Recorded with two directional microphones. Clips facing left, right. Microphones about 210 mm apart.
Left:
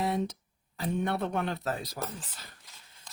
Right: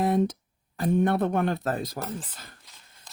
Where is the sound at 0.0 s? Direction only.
50° right (ahead or behind).